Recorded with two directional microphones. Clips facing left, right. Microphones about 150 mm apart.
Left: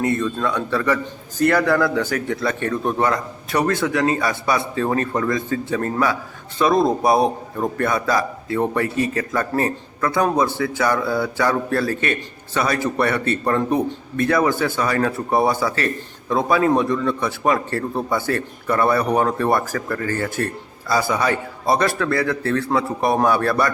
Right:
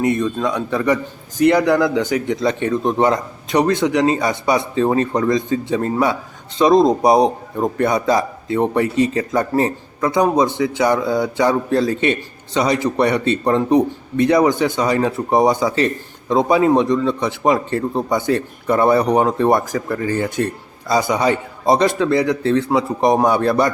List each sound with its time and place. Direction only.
0.0 s a man's voice: 15° right (ahead or behind)